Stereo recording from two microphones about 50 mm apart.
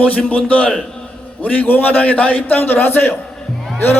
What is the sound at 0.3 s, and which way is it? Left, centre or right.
A man's voice, left.